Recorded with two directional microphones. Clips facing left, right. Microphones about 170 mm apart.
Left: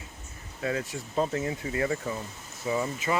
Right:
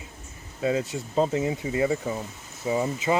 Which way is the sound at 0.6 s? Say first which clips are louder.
Right 5 dB; 20° right (ahead or behind).